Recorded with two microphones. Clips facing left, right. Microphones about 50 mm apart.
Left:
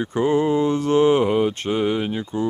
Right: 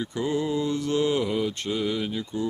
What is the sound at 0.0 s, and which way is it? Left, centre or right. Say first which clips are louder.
Speech: left 8 dB; left.